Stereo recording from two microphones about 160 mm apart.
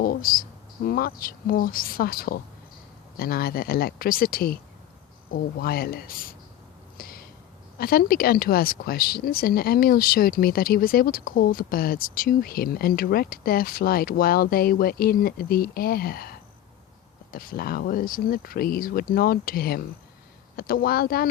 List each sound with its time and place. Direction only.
0.0 s speech: 70° left (ahead or behind)
6.9 s a sound: 65° left (ahead or behind)
7.8 s speech: 70° left (ahead or behind)
17.3 s speech: 65° left (ahead or behind)